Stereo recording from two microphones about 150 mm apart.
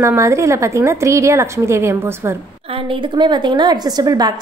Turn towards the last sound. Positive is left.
turn(degrees=-25)  # may be behind; listen again after turning